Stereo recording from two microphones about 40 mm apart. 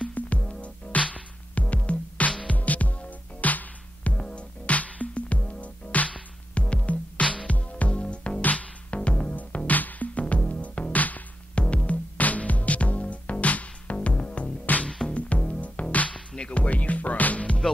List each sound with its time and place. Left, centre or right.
0.2 s music: left
4.2 s music: left
7.2 s music: left
8.4 s music: left
16.1 s music: left